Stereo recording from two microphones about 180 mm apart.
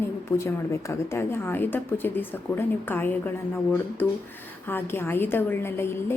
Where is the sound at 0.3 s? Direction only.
15° left (ahead or behind).